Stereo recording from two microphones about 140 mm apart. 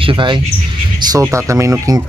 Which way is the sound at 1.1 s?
20° right (ahead or behind).